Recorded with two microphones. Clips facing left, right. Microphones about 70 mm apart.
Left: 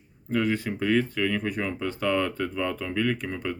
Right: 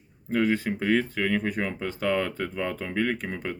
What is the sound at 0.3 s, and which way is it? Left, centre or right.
Speech, right.